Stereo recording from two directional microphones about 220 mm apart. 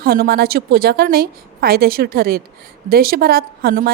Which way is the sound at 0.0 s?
45° right (ahead or behind).